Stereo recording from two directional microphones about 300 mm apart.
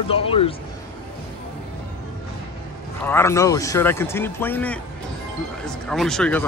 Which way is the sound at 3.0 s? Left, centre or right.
Centre.